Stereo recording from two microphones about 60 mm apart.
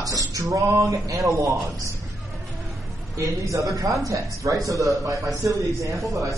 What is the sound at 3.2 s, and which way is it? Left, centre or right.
A man's voice, right.